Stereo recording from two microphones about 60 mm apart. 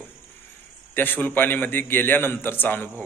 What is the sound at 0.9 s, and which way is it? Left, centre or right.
A man's voice, left.